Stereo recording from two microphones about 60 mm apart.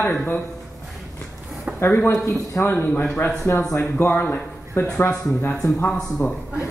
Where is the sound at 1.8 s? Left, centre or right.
Left.